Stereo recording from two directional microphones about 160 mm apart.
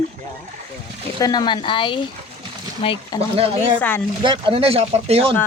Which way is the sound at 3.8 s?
10° left (ahead or behind).